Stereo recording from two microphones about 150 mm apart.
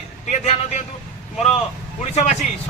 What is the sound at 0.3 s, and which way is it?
Speech, 50° left (ahead or behind).